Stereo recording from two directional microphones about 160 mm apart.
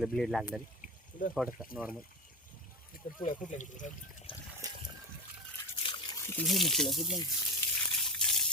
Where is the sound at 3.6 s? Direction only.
50° left (ahead or behind).